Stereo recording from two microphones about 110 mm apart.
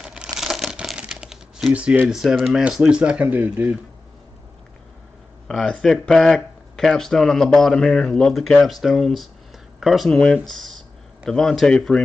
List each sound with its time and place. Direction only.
0.0 s crumpling: 5° right (ahead or behind)
5.5 s speech: 5° left (ahead or behind)